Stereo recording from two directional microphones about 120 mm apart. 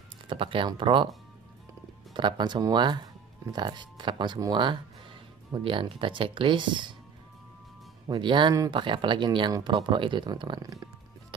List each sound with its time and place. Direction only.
0.3 s speech: 45° right (ahead or behind)
2.1 s speech: 40° right (ahead or behind)
8.1 s speech: 40° right (ahead or behind)